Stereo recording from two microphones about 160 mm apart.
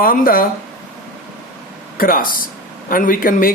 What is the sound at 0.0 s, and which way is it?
Speech, 65° left (ahead or behind).